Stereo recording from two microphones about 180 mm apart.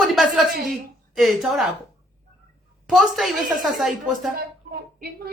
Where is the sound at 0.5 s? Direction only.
50° right (ahead or behind).